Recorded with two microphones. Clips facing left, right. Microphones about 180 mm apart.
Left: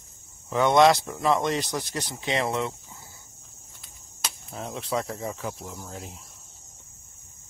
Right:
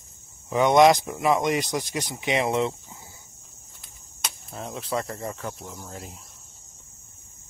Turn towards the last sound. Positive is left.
turn(degrees=0)  # may be behind; listen again after turning